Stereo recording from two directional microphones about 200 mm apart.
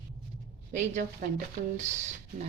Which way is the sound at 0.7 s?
40° right (ahead or behind).